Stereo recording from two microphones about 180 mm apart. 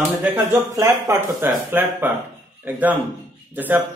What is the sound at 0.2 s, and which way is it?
Speech, 10° right (ahead or behind).